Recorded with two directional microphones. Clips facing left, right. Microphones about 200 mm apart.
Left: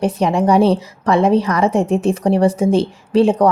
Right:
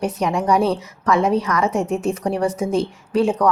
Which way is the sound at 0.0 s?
30° left (ahead or behind).